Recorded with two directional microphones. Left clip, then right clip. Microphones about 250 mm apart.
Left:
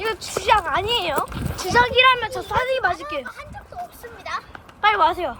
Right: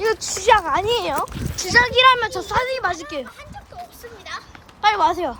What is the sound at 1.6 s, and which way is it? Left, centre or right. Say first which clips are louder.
Speech: right 2 dB; centre.